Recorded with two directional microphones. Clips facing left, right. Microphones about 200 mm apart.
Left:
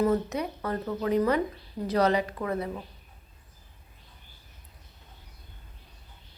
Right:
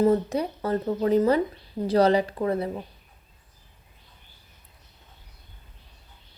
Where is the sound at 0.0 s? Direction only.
30° right (ahead or behind).